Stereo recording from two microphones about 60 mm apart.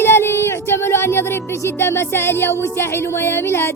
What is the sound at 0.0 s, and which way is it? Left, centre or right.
Music, left.